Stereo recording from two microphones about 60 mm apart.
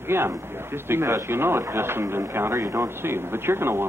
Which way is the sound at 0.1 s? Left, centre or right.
Right.